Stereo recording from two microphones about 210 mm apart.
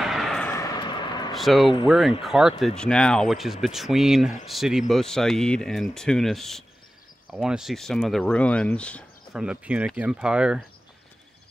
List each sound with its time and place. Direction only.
0.0 s vehicle: centre (ahead or behind)
0.5 s a sound: 15° left (ahead or behind)
1.3 s speech: centre (ahead or behind)